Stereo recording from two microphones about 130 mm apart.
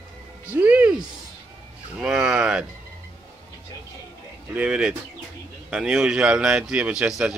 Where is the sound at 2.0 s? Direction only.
5° right (ahead or behind).